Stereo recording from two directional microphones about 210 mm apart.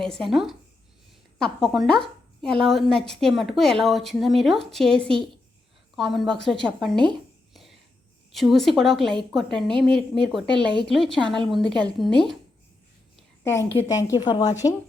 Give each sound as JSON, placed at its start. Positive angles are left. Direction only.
{"t": 0.0, "sound": "a woman's voice", "side_deg": 0}
{"t": 13.4, "sound": "a woman's voice", "side_deg": 10}